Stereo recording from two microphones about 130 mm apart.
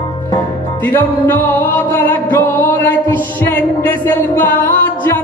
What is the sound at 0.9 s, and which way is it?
Music, 15° left (ahead or behind).